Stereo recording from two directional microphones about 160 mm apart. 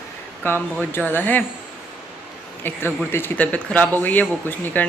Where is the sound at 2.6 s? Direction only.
15° left (ahead or behind).